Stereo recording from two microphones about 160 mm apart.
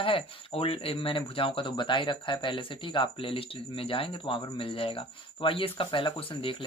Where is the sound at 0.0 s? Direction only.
35° left (ahead or behind).